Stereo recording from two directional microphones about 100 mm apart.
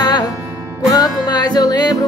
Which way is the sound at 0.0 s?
45° left (ahead or behind).